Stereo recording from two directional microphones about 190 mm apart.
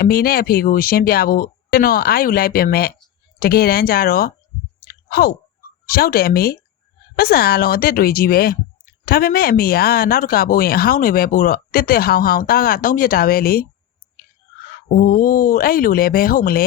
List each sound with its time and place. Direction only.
0.0 s speech: 50° left (ahead or behind)
4.9 s chewing: 50° left (ahead or behind)
5.8 s speech: 50° left (ahead or behind)
15.0 s speech: 45° left (ahead or behind)